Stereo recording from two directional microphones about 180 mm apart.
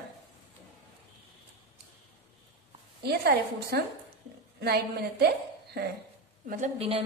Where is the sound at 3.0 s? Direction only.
60° right (ahead or behind).